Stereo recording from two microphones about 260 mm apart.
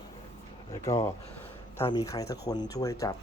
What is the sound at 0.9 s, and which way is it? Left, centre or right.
Speech, centre.